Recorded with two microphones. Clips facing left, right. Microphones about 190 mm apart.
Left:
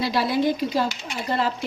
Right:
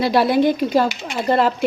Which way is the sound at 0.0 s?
60° right (ahead or behind).